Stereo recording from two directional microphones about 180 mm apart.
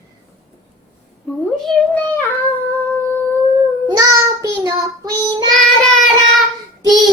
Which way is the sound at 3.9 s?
20° right (ahead or behind).